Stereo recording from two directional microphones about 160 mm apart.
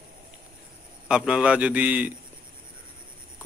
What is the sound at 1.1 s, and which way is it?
Speech, 5° right (ahead or behind).